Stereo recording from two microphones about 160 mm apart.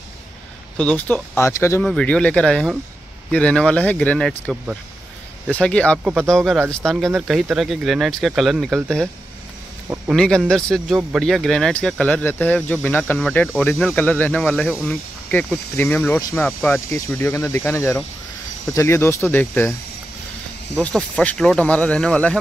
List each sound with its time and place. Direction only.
0.7 s speech: 10° left (ahead or behind)
1.8 s speech: 5° left (ahead or behind)
10.1 s speech: 5° left (ahead or behind)
20.7 s speech: 5° left (ahead or behind)